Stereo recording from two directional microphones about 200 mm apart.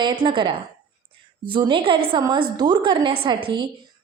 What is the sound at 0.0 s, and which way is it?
Speech, 25° right (ahead or behind).